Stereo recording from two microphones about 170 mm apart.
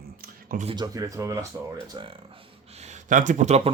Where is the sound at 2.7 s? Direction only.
40° right (ahead or behind).